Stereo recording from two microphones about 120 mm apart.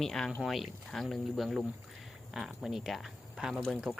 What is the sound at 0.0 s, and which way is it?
Speech, 5° left (ahead or behind).